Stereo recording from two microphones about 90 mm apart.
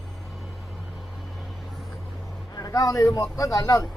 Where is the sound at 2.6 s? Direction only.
40° left (ahead or behind).